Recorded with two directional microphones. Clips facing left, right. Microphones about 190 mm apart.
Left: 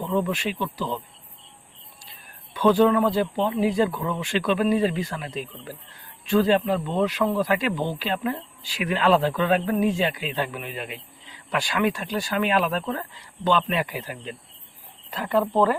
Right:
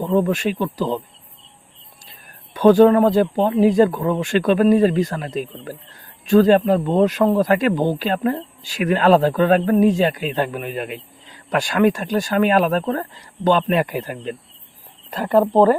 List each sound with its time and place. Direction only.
0.0 s speech: 45° right (ahead or behind)
2.5 s speech: 45° right (ahead or behind)